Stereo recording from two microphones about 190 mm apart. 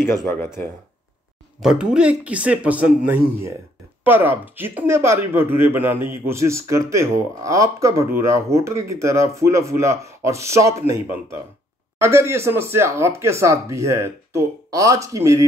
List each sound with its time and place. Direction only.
0.3 s speech: 10° left (ahead or behind)
1.6 s speech: 5° right (ahead or behind)
4.0 s speech: 10° right (ahead or behind)